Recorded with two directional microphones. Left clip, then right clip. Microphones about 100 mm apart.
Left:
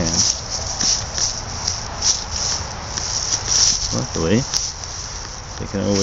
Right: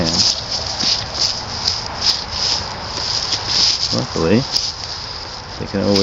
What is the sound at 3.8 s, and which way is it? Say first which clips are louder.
Cricket: right 4 dB; 10° left (ahead or behind).